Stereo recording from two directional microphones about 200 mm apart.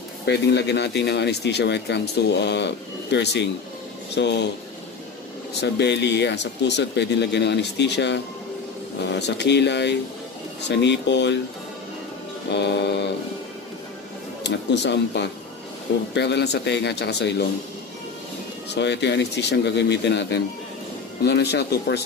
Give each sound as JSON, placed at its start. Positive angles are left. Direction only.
{"t": 0.2, "sound": "speech", "side_deg": 55}
{"t": 5.6, "sound": "speech", "side_deg": 60}
{"t": 9.2, "sound": "speech", "side_deg": 60}
{"t": 12.4, "sound": "speech", "side_deg": 60}
{"t": 14.4, "sound": "speech", "side_deg": 60}
{"t": 18.8, "sound": "speech", "side_deg": 60}